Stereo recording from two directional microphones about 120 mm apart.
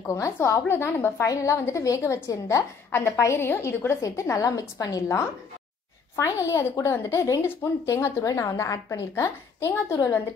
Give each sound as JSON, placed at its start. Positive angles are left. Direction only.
{"t": 0.0, "sound": "a woman's voice", "side_deg": 25}